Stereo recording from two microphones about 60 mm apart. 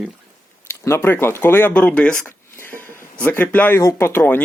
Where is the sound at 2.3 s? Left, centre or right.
Left.